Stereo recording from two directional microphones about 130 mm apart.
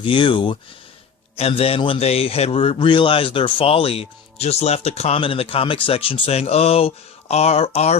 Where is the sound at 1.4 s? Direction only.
50° left (ahead or behind).